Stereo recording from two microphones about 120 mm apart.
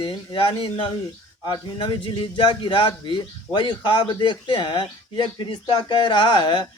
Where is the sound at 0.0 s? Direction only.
45° left (ahead or behind).